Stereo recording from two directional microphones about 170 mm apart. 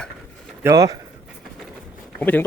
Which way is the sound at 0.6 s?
20° right (ahead or behind).